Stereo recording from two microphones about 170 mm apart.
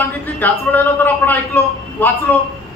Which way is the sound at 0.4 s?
10° left (ahead or behind).